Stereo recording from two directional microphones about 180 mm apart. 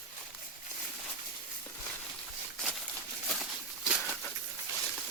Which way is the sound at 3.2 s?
Centre (ahead or behind).